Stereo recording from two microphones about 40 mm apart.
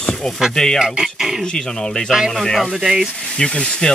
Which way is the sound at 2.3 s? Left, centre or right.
Centre.